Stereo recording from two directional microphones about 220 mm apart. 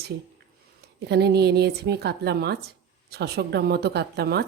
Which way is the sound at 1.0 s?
50° right (ahead or behind).